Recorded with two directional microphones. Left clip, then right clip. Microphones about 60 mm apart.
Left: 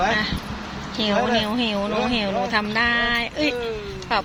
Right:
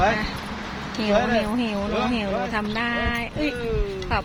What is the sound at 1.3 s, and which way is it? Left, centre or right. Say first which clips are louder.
Speech: left 2 dB; centre.